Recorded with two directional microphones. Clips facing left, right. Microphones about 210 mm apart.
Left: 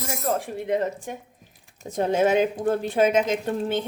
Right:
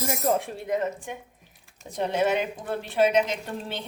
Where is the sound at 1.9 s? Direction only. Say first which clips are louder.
Left 4 dB; 45° left (ahead or behind).